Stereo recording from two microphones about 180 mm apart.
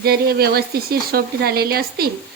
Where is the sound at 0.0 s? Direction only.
60° right (ahead or behind).